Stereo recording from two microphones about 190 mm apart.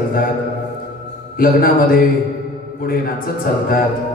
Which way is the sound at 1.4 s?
50° left (ahead or behind).